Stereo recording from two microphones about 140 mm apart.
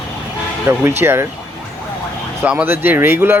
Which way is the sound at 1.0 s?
15° right (ahead or behind).